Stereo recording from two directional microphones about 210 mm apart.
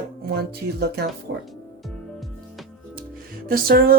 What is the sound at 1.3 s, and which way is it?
Speech, 55° right (ahead or behind).